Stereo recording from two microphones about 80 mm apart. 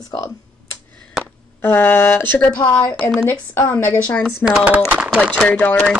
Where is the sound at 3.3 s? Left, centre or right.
Left.